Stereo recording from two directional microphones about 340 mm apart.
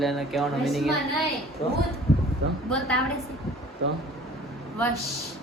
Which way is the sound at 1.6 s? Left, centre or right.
Centre.